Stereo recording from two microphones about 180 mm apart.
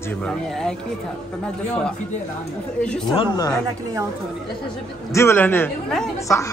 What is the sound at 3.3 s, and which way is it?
Speech, 20° left (ahead or behind).